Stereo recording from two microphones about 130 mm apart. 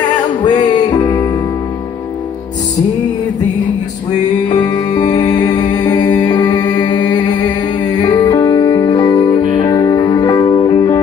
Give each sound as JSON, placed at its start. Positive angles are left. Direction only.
{"t": 0.0, "sound": "music", "side_deg": 30}
{"t": 4.5, "sound": "music", "side_deg": 35}